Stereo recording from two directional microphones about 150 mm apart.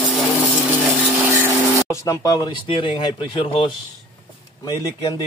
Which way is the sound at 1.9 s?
20° left (ahead or behind).